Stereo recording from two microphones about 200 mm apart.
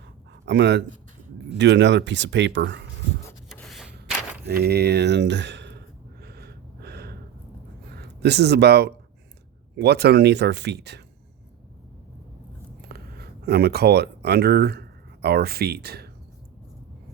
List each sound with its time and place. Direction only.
0.4 s speech: 60° right (ahead or behind)
3.5 s a sound: centre (ahead or behind)
4.4 s speech: 55° right (ahead or behind)
6.2 s gasp: 55° right (ahead or behind)
7.9 s speech: 55° right (ahead or behind)
12.8 s speech: 55° right (ahead or behind)